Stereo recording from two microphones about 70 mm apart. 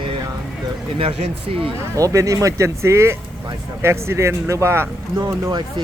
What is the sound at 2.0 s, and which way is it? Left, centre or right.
Speech, right.